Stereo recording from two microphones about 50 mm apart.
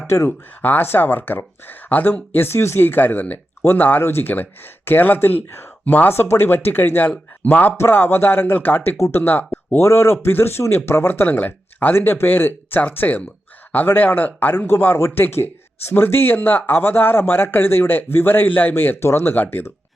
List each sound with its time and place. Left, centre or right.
0.3 s speech: left
5.8 s speech: left
9.7 s speech: left
11.1 s speech: left
11.9 s speech: left
14.9 s speech: left
15.9 s speech: left